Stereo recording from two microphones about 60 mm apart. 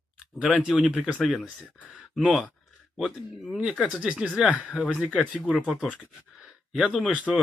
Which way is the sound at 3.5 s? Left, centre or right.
Centre.